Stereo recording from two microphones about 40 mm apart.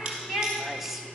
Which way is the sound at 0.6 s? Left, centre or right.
Centre.